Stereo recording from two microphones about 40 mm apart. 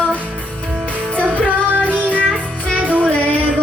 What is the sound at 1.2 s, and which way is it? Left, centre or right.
Music, right.